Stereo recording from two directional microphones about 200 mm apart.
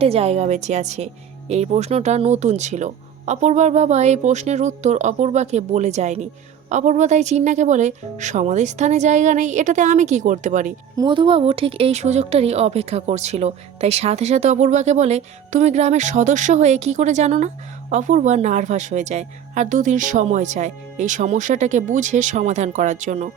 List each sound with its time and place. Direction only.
0.0 s speech: 30° right (ahead or behind)
10.9 s speech: 25° right (ahead or behind); by 23.3 s 40° right (ahead or behind)